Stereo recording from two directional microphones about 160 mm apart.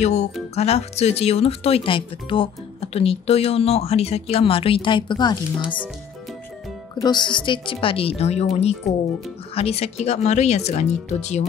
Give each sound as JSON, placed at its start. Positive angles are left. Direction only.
{"t": 0.0, "sound": "speech", "side_deg": 45}
{"t": 7.0, "sound": "speech", "side_deg": 25}